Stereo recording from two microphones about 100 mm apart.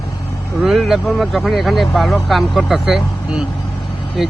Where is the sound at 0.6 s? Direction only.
Centre (ahead or behind).